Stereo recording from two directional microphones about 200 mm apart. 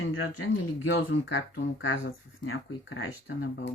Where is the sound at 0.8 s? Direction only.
70° left (ahead or behind).